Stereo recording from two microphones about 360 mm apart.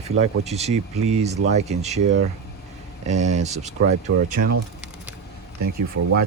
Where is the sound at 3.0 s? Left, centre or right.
Centre.